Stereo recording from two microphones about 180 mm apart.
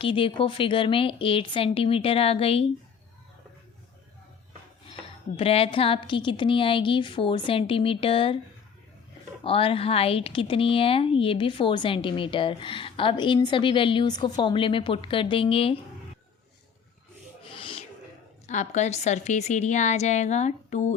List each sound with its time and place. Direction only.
0.0 s a woman's voice: 30° left (ahead or behind)
5.4 s a woman's voice: 30° left (ahead or behind)
9.4 s a woman's voice: 30° left (ahead or behind)
17.6 s a sound: 30° left (ahead or behind)
18.4 s a woman's voice: 40° left (ahead or behind)